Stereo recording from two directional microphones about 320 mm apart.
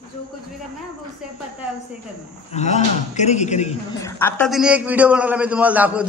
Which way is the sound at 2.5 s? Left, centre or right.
Left.